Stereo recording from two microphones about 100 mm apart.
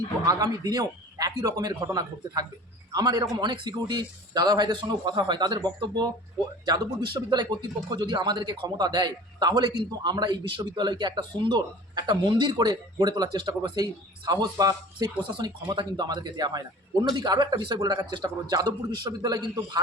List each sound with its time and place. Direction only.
0.3 s a man's voice: 35° right (ahead or behind)